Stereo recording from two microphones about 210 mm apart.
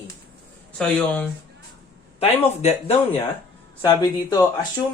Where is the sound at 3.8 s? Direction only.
20° left (ahead or behind).